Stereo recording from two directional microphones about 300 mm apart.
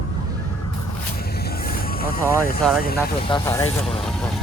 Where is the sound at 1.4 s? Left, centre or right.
Left.